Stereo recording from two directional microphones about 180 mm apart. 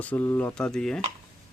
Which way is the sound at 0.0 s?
10° left (ahead or behind).